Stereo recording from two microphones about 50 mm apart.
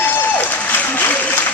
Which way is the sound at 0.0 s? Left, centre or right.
Left.